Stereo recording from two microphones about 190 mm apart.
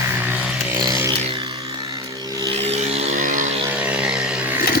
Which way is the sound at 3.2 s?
45° right (ahead or behind).